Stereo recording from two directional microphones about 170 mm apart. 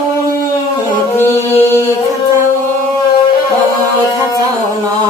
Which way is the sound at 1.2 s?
15° left (ahead or behind).